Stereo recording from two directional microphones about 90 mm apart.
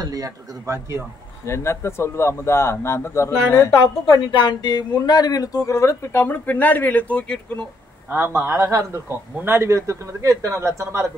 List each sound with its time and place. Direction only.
0.0 s a man's voice: 40° right (ahead or behind)
1.4 s speech: 30° left (ahead or behind)
4.0 s speech: 60° left (ahead or behind); by 7.3 s 15° left (ahead or behind)
8.1 s a man's voice: 20° right (ahead or behind)
8.5 s a man's voice: 35° right (ahead or behind)